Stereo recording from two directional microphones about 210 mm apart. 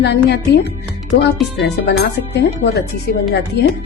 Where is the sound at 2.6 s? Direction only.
50° left (ahead or behind).